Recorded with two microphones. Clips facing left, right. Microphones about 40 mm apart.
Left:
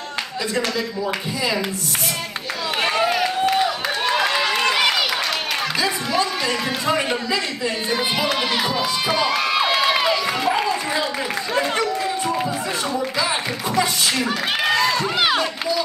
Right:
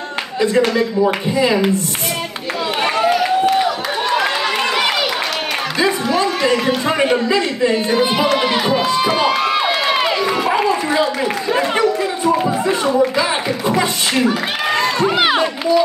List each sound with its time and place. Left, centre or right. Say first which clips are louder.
0.4 s speech: right 9 dB; right
3.6 s a sound: right 3 dB; centre
5.8 s a man's voice: right 7 dB; right
7.9 s speech: right 6 dB; centre
8.4 s crowd: right 5 dB; centre
10.4 s a sound: right 4 dB; right
11.5 s chatter: right 5 dB; right
12.3 s a sound: right 7 dB; right
14.7 s run: right 5 dB; right